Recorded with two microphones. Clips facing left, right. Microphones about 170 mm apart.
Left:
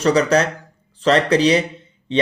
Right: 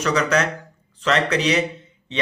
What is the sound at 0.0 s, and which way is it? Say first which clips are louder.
Speech: left 5 dB; 30° left (ahead or behind).